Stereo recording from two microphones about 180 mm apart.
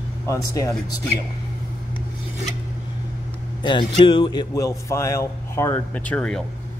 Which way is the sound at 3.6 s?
25° left (ahead or behind).